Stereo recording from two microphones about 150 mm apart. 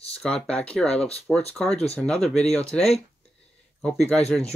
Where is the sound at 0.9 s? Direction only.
45° left (ahead or behind).